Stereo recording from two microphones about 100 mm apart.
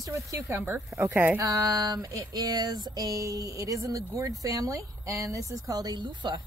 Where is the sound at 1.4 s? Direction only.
35° right (ahead or behind); by 6.4 s 50° right (ahead or behind).